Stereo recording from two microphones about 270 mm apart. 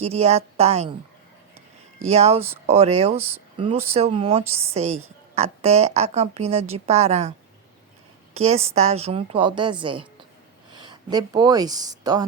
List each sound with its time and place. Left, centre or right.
0.0 s a woman's voice: right
2.0 s a woman's voice: right
3.2 s speech: centre
3.9 s a woman's voice: right